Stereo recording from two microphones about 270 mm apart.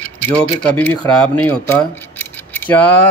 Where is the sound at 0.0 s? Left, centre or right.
Centre.